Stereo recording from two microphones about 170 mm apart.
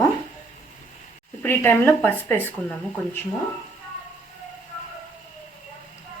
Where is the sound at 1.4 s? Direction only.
10° left (ahead or behind).